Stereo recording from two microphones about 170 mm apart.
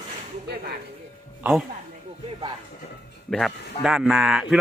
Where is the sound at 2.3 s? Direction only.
30° right (ahead or behind).